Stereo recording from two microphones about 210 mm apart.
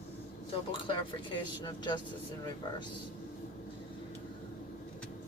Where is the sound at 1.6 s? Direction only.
20° left (ahead or behind).